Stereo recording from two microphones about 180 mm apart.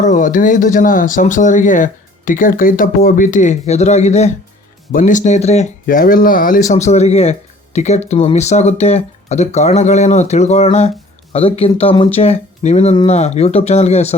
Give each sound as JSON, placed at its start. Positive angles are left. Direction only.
{"t": 0.0, "sound": "speech", "side_deg": 45}
{"t": 5.8, "sound": "speech", "side_deg": 50}